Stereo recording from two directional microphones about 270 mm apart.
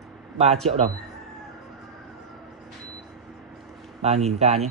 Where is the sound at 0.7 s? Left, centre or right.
Right.